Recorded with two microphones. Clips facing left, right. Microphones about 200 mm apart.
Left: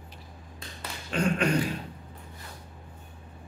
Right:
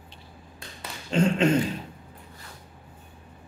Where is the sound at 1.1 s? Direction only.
25° right (ahead or behind).